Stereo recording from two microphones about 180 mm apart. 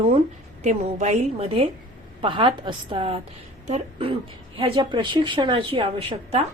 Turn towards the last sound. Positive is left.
turn(degrees=-30)  # may be behind; listen again after turning